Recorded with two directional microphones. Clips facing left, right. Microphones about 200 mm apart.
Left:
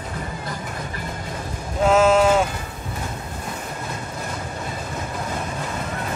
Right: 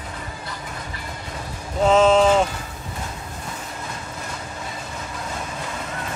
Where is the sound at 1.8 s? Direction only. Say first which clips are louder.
Right 1 dB; 5° left (ahead or behind).